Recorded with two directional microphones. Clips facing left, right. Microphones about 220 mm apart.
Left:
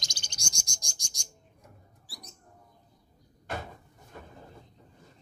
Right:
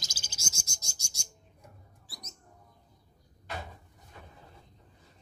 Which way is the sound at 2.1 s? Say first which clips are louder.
Left 1 dB; 20° right (ahead or behind).